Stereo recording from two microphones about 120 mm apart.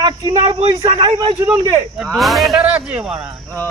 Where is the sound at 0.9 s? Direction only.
50° right (ahead or behind).